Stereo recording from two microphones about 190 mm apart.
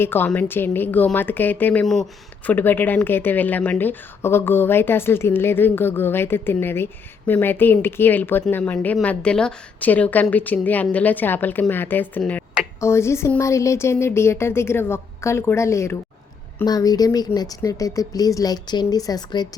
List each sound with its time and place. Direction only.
0.0 s speech: 10° left (ahead or behind)